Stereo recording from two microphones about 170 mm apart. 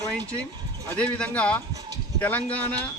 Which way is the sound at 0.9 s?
5° left (ahead or behind).